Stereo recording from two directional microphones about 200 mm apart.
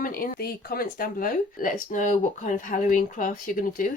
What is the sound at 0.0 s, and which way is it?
Speech, 45° left (ahead or behind).